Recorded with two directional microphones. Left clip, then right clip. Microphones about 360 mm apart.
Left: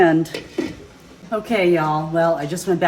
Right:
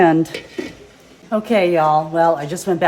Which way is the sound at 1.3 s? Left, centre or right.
Right.